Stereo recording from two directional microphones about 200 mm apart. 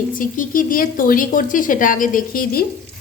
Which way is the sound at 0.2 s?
45° left (ahead or behind).